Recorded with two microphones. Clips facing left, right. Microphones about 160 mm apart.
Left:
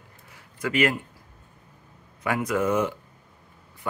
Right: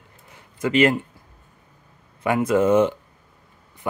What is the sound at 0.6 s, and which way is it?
Speech, 25° right (ahead or behind).